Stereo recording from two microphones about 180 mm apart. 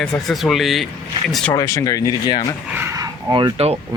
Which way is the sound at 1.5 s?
20° left (ahead or behind).